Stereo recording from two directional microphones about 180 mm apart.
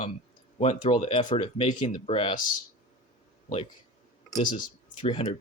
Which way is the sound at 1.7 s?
45° left (ahead or behind).